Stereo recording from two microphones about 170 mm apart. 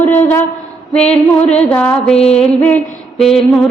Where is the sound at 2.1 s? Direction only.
35° left (ahead or behind).